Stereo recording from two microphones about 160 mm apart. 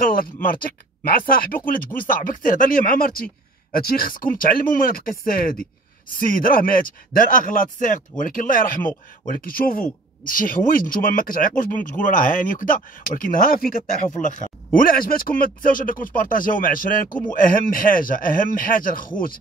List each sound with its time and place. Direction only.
0.2 s speech: 65° left (ahead or behind)